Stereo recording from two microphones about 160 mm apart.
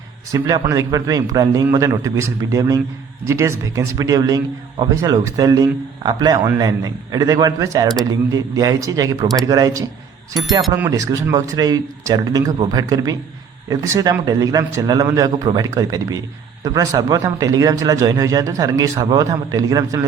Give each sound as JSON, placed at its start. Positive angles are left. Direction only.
{"t": 0.3, "sound": "a man's voice", "side_deg": -25}